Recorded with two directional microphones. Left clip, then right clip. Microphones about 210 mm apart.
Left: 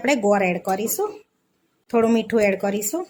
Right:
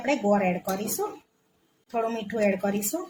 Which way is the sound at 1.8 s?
40° left (ahead or behind).